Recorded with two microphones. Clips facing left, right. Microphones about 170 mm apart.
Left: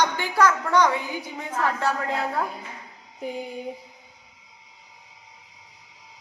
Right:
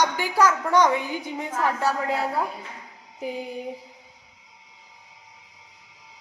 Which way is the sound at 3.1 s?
5° right (ahead or behind).